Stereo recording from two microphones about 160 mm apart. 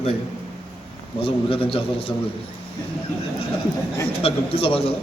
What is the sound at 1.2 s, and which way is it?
Speech, 35° left (ahead or behind).